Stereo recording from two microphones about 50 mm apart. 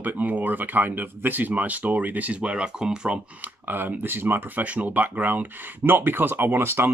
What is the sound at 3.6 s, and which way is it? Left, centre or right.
Speech, right.